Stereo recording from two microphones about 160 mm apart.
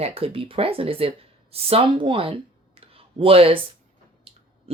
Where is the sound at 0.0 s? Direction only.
35° right (ahead or behind).